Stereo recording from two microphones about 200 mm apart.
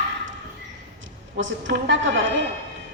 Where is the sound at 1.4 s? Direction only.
70° right (ahead or behind).